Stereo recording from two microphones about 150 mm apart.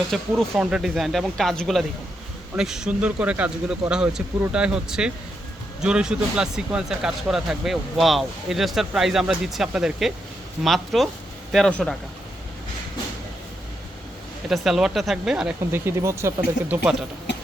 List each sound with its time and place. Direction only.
0.1 s speech: centre (ahead or behind)
14.5 s speech: centre (ahead or behind)
15.7 s speech: 15° right (ahead or behind)